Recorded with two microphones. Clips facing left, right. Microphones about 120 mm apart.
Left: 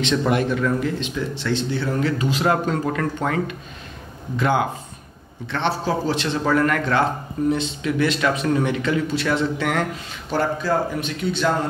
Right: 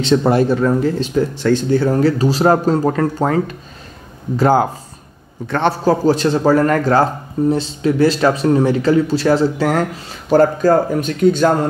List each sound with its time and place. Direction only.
0.0 s a man's voice: 35° right (ahead or behind)